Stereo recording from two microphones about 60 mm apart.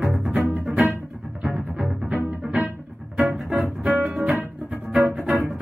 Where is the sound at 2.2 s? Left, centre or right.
Centre.